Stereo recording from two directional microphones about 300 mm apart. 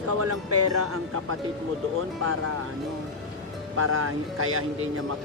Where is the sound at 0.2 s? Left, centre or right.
Right.